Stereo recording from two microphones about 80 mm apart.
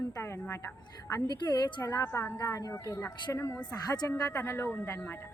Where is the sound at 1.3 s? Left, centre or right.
Left.